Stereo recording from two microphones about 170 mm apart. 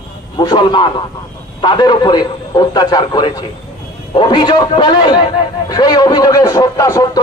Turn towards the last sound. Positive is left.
turn(degrees=20)  # may be behind; listen again after turning